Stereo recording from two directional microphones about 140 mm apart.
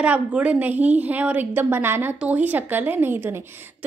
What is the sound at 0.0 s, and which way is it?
A woman's voice, 10° right (ahead or behind).